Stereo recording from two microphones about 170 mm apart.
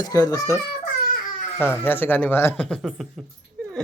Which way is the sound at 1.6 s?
15° left (ahead or behind).